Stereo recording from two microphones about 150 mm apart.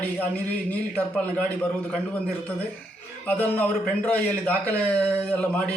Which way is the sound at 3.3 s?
10° left (ahead or behind).